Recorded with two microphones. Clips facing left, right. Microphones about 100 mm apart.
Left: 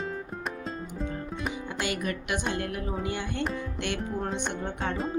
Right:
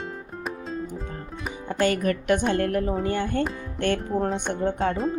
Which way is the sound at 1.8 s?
45° right (ahead or behind).